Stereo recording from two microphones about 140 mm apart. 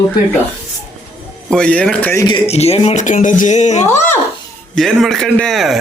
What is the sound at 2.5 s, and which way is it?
Speech, 50° left (ahead or behind).